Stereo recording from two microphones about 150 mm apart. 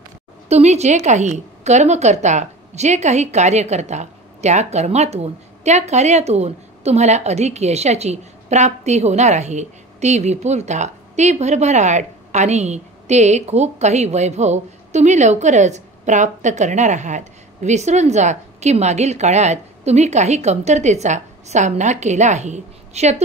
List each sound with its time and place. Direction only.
0.5 s a woman's voice: 45° right (ahead or behind)